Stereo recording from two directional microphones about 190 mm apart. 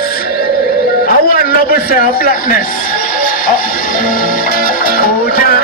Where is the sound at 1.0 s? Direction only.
50° left (ahead or behind).